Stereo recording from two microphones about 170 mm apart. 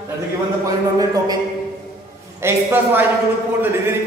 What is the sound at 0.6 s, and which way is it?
Speech, 20° right (ahead or behind).